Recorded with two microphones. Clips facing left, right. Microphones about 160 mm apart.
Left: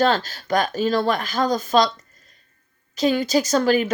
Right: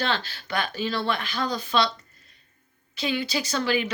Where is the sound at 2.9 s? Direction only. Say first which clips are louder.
Left 8 dB; 40° left (ahead or behind).